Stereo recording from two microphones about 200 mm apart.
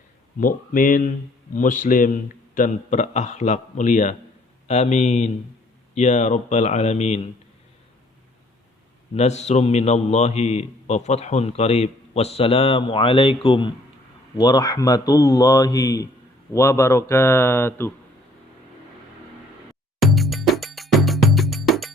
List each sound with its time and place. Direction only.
0.3 s a man's voice: 45° left (ahead or behind)
9.1 s a man's voice: 35° left (ahead or behind); by 17.9 s 10° left (ahead or behind)
20.0 s music: centre (ahead or behind)